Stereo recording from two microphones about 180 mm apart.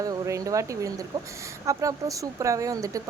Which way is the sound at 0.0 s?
20° right (ahead or behind).